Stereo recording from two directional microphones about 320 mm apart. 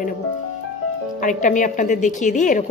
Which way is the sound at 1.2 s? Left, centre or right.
Left.